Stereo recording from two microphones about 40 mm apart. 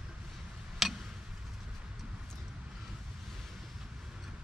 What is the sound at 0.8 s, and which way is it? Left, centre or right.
Tick-tock, centre.